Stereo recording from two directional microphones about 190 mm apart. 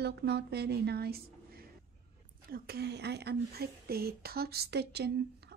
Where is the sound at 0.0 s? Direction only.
60° right (ahead or behind).